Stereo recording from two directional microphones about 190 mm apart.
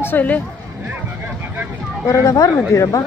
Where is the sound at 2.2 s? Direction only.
15° left (ahead or behind).